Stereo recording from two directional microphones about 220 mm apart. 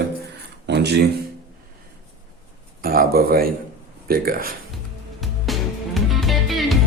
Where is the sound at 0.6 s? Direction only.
50° right (ahead or behind).